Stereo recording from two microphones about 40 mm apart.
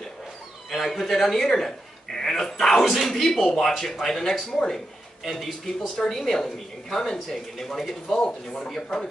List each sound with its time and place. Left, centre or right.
0.7 s a man's voice: centre
2.1 s dog: centre
2.7 s speech: centre
8.2 s speech: left